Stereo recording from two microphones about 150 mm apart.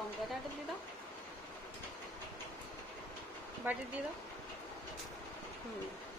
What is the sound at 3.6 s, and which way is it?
Speech, 15° right (ahead or behind).